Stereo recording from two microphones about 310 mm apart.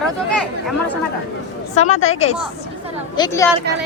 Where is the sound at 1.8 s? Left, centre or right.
Left.